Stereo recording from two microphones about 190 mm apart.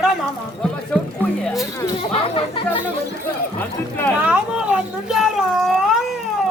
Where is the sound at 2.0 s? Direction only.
30° left (ahead or behind).